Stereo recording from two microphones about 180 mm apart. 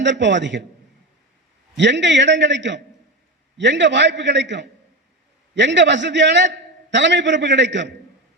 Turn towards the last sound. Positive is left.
turn(degrees=-80)